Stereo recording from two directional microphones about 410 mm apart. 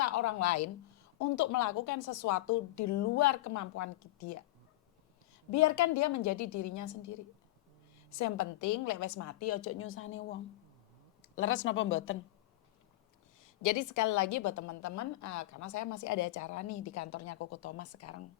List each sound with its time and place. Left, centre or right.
0.0 s a woman's voice: left
5.5 s a woman's voice: left
13.4 s a woman's voice: left